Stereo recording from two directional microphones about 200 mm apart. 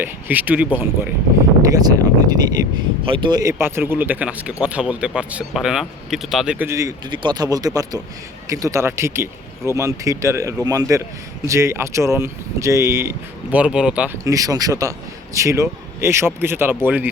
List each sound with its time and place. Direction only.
0.0 s speech: 10° right (ahead or behind)
1.7 s speech: 20° right (ahead or behind)